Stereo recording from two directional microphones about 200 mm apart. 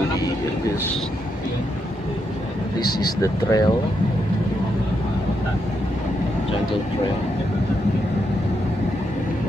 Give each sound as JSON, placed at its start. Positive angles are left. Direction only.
{"t": 3.0, "sound": "speech", "side_deg": 15}